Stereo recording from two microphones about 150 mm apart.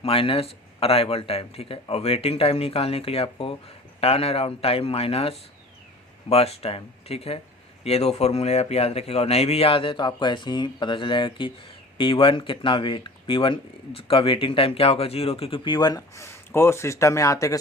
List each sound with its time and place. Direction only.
0.0 s speech: 40° left (ahead or behind); by 17.6 s 20° left (ahead or behind)